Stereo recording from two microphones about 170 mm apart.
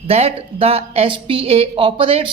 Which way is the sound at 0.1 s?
35° right (ahead or behind).